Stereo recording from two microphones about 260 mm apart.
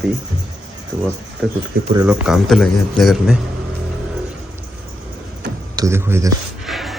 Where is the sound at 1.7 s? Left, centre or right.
Right.